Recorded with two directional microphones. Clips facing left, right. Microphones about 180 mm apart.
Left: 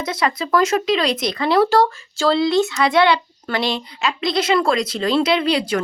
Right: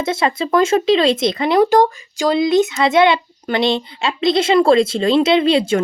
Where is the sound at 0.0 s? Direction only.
25° right (ahead or behind).